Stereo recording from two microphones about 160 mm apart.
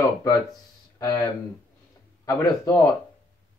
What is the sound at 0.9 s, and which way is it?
Speech, 25° left (ahead or behind).